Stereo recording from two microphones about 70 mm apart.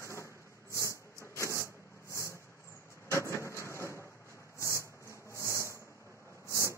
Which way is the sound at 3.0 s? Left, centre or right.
Left.